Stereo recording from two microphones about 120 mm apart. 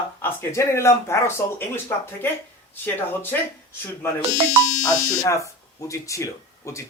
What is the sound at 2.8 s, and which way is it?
Speech, 15° left (ahead or behind).